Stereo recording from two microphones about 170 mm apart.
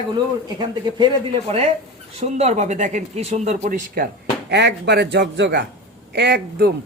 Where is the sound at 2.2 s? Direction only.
40° right (ahead or behind); by 4.1 s 55° right (ahead or behind).